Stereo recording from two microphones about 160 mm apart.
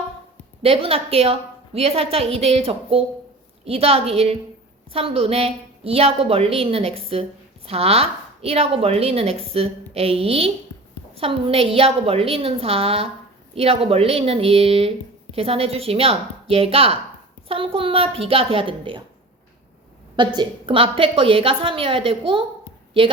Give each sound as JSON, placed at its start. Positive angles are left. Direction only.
{"t": 0.6, "sound": "a woman's voice", "side_deg": -35}
{"t": 20.1, "sound": "a woman's voice", "side_deg": -30}